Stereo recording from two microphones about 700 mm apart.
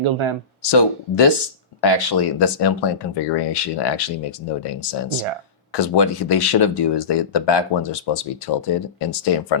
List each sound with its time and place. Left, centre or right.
0.0 s speech: right
0.6 s speech: left